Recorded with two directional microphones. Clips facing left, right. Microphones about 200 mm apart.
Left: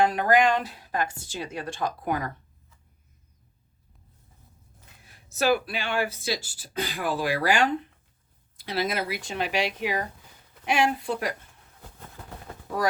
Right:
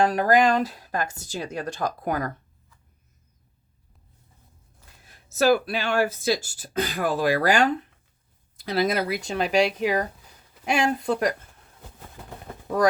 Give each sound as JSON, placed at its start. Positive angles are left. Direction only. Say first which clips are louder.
{"t": 0.0, "sound": "a woman's voice", "louder": "right 2 dB", "side_deg": -35}
{"t": 5.7, "sound": "speech", "louder": "right 5 dB", "side_deg": -40}
{"t": 8.7, "sound": "a woman's voice", "louder": "right 5 dB", "side_deg": -40}